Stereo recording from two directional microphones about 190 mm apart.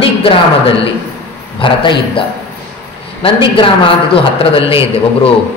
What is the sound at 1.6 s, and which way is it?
A man's voice, 25° left (ahead or behind).